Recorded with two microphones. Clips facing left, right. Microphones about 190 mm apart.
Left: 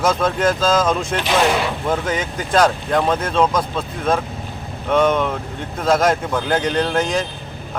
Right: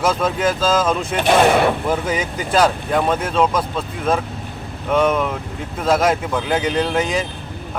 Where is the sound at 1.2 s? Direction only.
55° right (ahead or behind).